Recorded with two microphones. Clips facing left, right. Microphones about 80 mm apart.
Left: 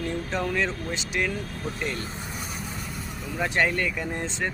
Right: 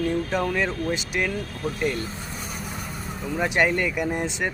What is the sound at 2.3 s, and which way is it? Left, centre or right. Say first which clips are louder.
Vehicle: right 1 dB; centre.